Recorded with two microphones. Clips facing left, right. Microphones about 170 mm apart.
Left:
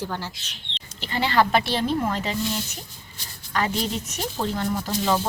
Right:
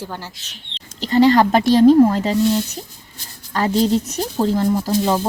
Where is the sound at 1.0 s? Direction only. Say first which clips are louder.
Right 9 dB; 40° right (ahead or behind).